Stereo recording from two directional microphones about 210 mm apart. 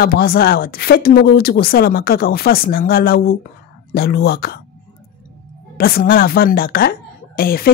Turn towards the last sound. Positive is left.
turn(degrees=45)  # may be behind; listen again after turning